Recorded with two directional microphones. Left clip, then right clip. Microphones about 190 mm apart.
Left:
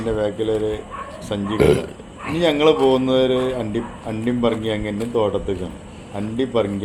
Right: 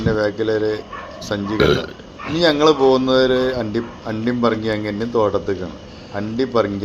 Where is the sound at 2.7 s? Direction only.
25° right (ahead or behind).